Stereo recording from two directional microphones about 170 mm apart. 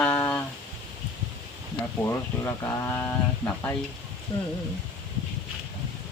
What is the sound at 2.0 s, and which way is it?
Speech, 15° left (ahead or behind).